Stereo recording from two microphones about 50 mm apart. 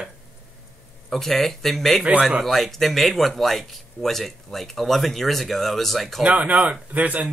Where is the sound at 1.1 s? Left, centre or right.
Centre.